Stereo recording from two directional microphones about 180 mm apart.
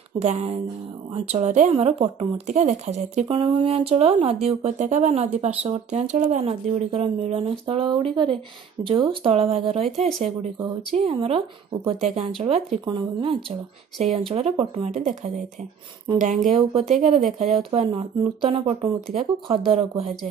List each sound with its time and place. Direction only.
0.2 s speech: 35° right (ahead or behind)
3.3 s speech: 30° right (ahead or behind)
9.8 s speech: centre (ahead or behind)
11.1 s speech: 30° right (ahead or behind)
16.5 s speech: 35° right (ahead or behind)